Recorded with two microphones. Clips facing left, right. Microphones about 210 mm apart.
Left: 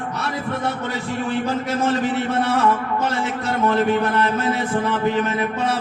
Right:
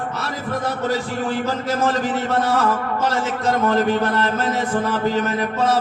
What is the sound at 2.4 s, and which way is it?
A man's voice, 40° right (ahead or behind).